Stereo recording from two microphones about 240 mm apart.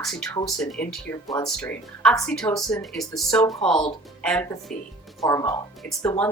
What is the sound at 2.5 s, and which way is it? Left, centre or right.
Speech, centre.